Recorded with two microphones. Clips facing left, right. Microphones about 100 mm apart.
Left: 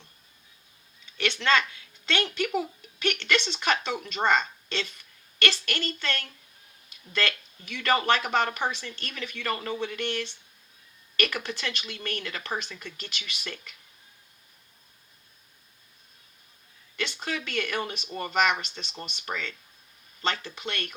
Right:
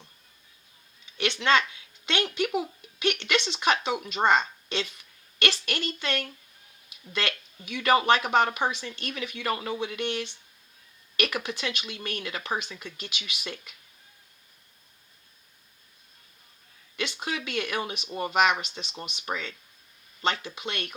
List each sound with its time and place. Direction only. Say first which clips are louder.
1.2 s speech: right 1 dB; 15° right (ahead or behind)
17.0 s speech: even; 15° right (ahead or behind)